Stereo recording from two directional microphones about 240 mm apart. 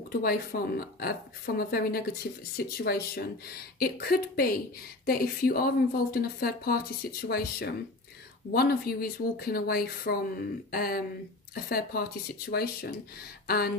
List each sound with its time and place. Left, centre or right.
0.2 s a woman's voice: left